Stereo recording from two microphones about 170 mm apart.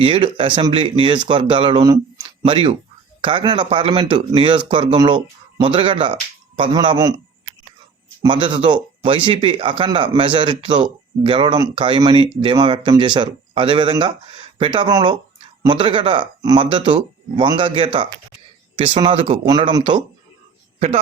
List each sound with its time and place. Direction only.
0.0 s speech: 30° right (ahead or behind)